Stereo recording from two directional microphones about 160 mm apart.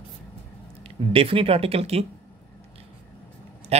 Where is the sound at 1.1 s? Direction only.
35° right (ahead or behind).